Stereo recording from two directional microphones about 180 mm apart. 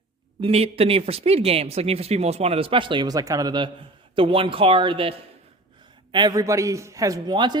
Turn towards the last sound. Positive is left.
turn(degrees=-25)  # may be behind; listen again after turning